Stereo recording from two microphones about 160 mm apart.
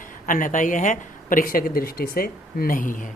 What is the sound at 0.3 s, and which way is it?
A woman's voice, 55° left (ahead or behind).